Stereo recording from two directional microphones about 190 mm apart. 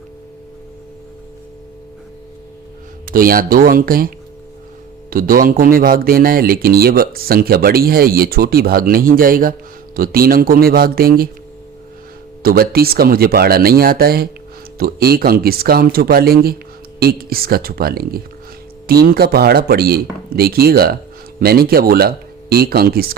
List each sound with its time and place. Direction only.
3.1 s speech: 50° right (ahead or behind)
5.1 s speech: 50° right (ahead or behind)
12.4 s speech: 50° right (ahead or behind)